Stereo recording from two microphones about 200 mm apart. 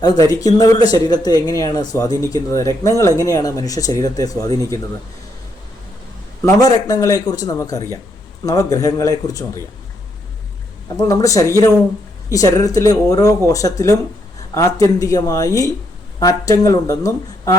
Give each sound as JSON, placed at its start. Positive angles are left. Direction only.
{"t": 0.0, "sound": "speech", "side_deg": 20}
{"t": 6.4, "sound": "speech", "side_deg": 20}
{"t": 11.1, "sound": "speech", "side_deg": 15}